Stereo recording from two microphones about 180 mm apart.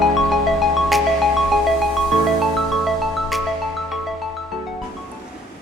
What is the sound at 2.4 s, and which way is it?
Music, centre (ahead or behind).